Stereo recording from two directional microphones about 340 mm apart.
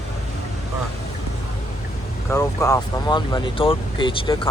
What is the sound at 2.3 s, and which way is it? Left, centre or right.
Speech, centre.